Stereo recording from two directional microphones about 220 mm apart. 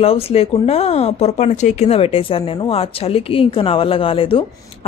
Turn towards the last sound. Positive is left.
turn(degrees=25)  # may be behind; listen again after turning